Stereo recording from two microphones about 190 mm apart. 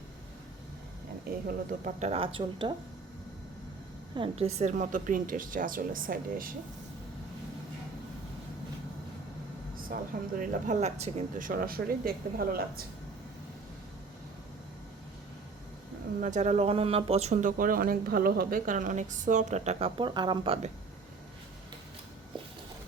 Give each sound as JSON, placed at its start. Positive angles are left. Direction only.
{"t": 1.5, "sound": "speech", "side_deg": -40}
{"t": 4.1, "sound": "speech", "side_deg": -30}
{"t": 9.9, "sound": "speech", "side_deg": -45}
{"t": 16.2, "sound": "speech", "side_deg": -40}